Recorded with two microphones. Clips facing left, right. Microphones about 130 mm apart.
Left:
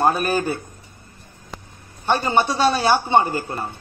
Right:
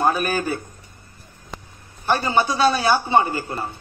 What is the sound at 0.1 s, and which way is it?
Speech, 30° left (ahead or behind).